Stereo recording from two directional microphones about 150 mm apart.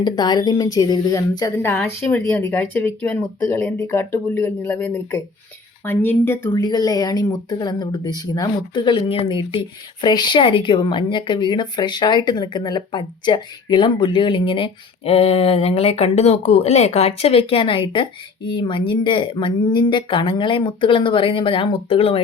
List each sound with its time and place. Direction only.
0.0 s a woman's voice: 30° left (ahead or behind)
1.5 s speech: 15° left (ahead or behind)
6.5 s speech: 25° left (ahead or behind)